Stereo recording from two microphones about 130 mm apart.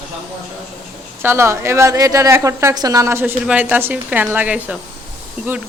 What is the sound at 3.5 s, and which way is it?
A woman's voice, 10° right (ahead or behind).